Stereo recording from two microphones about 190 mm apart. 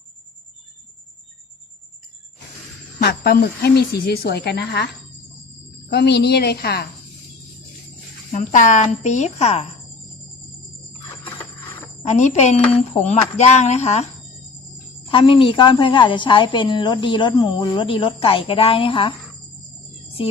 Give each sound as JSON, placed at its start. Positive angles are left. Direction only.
{"t": 3.0, "sound": "speech", "side_deg": 55}
{"t": 5.9, "sound": "speech", "side_deg": 60}
{"t": 8.3, "sound": "speech", "side_deg": 40}
{"t": 12.0, "sound": "speech", "side_deg": 40}
{"t": 15.1, "sound": "a woman's voice", "side_deg": 25}